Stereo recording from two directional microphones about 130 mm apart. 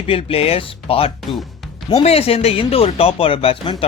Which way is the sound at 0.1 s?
50° left (ahead or behind).